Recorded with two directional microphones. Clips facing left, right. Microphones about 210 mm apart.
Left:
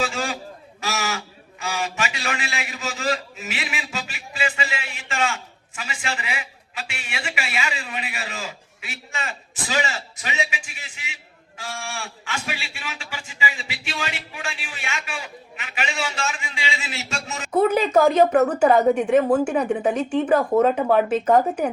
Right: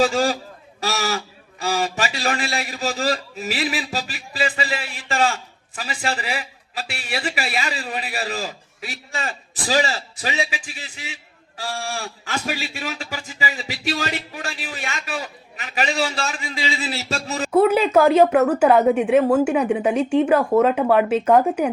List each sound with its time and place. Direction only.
0.0 s a man's voice: 35° right (ahead or behind)
17.5 s speech: 10° right (ahead or behind)